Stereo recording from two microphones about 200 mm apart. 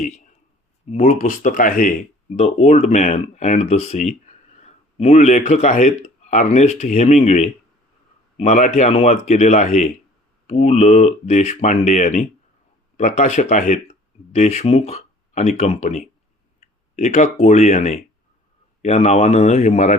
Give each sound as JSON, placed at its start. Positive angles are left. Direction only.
{"t": 0.9, "sound": "speech", "side_deg": 35}